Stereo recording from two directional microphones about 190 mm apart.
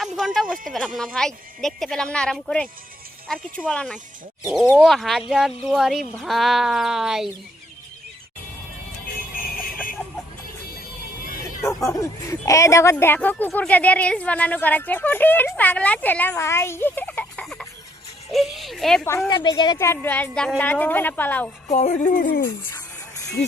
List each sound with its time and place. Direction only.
0.0 s a woman's voice: centre (ahead or behind)
9.3 s music: 50° left (ahead or behind)
11.8 s speech: 15° left (ahead or behind); by 19.0 s centre (ahead or behind)
19.3 s speech: 25° left (ahead or behind); by 21.5 s 10° left (ahead or behind)
21.7 s speech: 40° left (ahead or behind)
23.1 s music: 15° left (ahead or behind)